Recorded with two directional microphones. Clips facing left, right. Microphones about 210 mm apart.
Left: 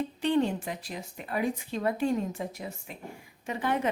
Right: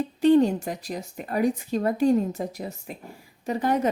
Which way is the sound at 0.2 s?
40° right (ahead or behind).